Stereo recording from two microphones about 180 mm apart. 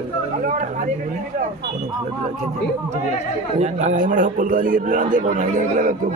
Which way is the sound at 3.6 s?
40° right (ahead or behind).